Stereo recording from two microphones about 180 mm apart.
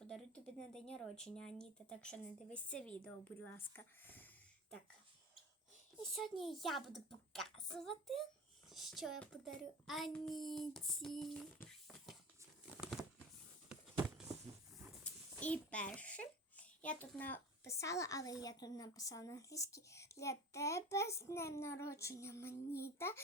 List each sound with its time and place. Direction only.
0.1 s speech: 5° left (ahead or behind)
6.1 s speech: centre (ahead or behind)
12.6 s crumpling: 5° right (ahead or behind)
14.8 s a child's voice: 5° left (ahead or behind)